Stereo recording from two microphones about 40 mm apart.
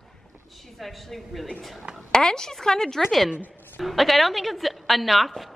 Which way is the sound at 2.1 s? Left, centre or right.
Centre.